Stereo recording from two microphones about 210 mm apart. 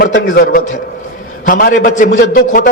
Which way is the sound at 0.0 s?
45° left (ahead or behind).